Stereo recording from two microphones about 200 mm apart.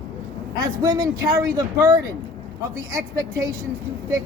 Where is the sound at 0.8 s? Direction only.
20° right (ahead or behind).